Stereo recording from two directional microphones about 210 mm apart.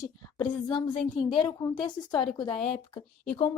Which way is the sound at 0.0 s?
20° left (ahead or behind).